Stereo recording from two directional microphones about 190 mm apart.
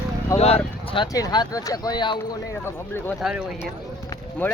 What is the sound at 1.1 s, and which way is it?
Speech, 20° left (ahead or behind).